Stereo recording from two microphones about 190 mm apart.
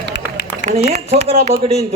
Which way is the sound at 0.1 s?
65° left (ahead or behind).